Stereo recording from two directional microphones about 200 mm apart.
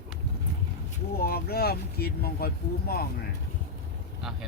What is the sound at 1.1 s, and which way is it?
Speech, 50° left (ahead or behind).